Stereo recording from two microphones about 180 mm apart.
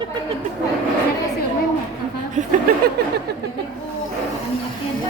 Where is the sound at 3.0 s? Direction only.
65° right (ahead or behind).